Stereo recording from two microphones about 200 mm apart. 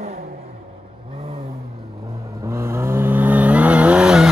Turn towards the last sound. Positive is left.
turn(degrees=-5)  # may be behind; listen again after turning